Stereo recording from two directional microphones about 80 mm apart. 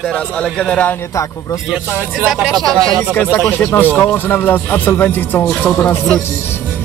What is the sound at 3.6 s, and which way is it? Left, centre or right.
Speech, left.